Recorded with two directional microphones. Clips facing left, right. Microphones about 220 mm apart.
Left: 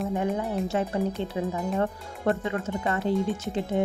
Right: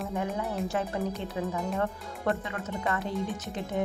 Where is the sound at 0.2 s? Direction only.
25° left (ahead or behind).